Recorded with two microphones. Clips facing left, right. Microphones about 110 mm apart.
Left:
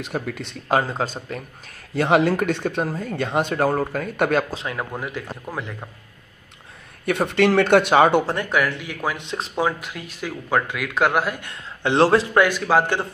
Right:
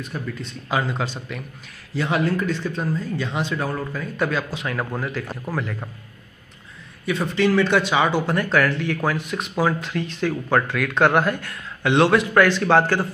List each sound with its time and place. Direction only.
0.0 s speech: 70° left (ahead or behind)
0.7 s speech: 40° left (ahead or behind)
2.0 s speech: 70° left (ahead or behind)
4.7 s speech: 15° left (ahead or behind)
7.1 s speech: 65° left (ahead or behind)
8.3 s speech: 20° left (ahead or behind)
9.2 s speech: 25° left (ahead or behind); by 11.4 s 5° left (ahead or behind)
11.4 s a man's voice: 30° left (ahead or behind)
12.4 s speech: 10° left (ahead or behind)